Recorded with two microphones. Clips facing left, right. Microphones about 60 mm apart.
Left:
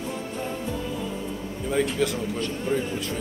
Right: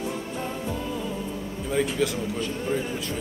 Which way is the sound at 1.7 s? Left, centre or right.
Centre.